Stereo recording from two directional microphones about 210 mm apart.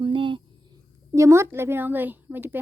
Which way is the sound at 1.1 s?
15° right (ahead or behind).